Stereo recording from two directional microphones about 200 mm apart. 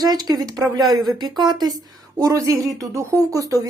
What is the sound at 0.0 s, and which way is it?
A woman's voice, 20° right (ahead or behind).